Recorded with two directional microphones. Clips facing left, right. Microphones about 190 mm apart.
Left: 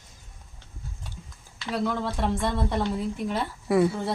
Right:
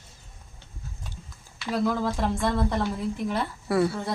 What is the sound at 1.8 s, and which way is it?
Speech, centre (ahead or behind).